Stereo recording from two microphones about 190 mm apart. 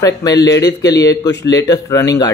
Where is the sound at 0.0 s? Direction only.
20° left (ahead or behind).